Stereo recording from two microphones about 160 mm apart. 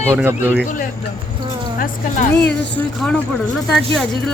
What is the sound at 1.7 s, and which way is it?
Speech, 60° left (ahead or behind).